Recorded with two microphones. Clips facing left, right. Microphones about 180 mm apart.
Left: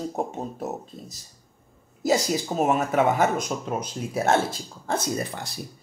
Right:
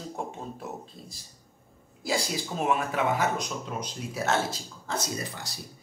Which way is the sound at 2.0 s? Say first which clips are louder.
Left 7 dB; 45° left (ahead or behind).